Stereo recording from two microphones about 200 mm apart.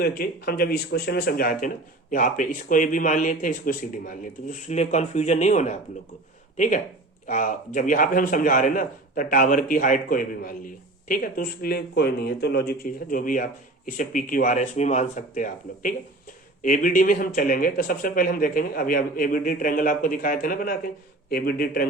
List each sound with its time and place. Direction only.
0.0 s speech: 50° left (ahead or behind)